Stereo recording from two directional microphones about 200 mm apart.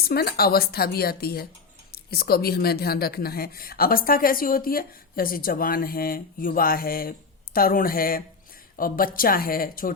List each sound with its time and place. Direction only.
0.0 s speech: 50° left (ahead or behind)